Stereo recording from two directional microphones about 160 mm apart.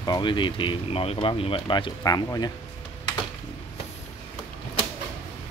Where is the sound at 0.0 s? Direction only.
30° left (ahead or behind).